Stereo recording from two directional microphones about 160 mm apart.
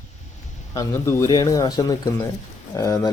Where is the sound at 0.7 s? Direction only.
20° left (ahead or behind).